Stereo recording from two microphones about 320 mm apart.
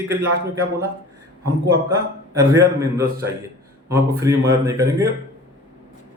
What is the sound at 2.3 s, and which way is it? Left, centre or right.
Speech, centre.